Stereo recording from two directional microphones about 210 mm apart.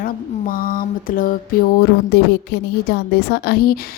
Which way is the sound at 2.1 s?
50° left (ahead or behind).